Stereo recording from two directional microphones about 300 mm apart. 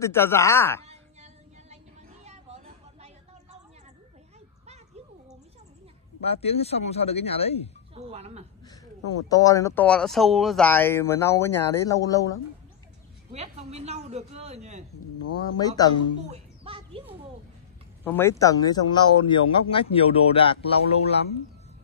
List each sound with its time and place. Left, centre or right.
0.0 s speech: centre
0.8 s a sound: right
6.2 s speech: centre
7.9 s speech: right
9.3 s speech: centre
13.3 s speech: right
15.5 s speech: centre
16.3 s a sound: centre
18.0 s speech: centre